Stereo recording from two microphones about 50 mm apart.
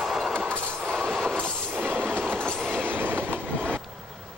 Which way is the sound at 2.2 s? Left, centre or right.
Centre.